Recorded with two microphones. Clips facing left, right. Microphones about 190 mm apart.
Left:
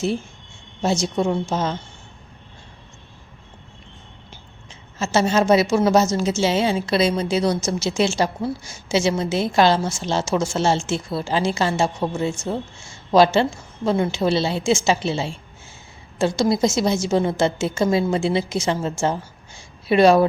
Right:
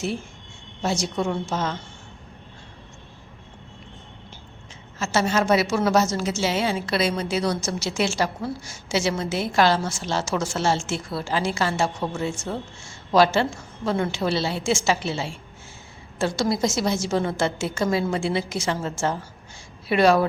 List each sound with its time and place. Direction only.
0.8 s a woman's voice: 25° left (ahead or behind)
4.9 s a woman's voice: 25° left (ahead or behind)